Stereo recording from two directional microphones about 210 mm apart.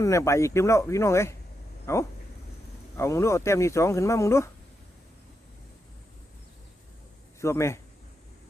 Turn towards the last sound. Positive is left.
turn(degrees=15)  # may be behind; listen again after turning